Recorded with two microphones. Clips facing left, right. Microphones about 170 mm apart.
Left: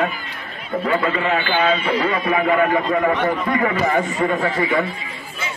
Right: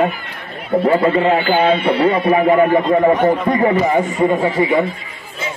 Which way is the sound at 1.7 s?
65° right (ahead or behind).